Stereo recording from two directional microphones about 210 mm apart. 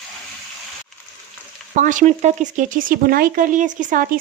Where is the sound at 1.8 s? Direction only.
35° right (ahead or behind).